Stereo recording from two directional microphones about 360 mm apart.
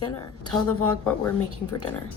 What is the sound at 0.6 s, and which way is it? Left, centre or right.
Speech, left.